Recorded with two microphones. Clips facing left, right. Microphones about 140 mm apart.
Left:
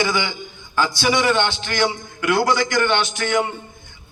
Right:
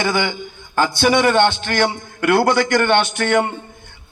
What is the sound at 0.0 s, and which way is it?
A man's voice, 55° right (ahead or behind).